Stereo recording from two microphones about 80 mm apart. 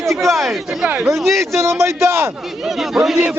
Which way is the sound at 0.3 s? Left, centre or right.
Centre.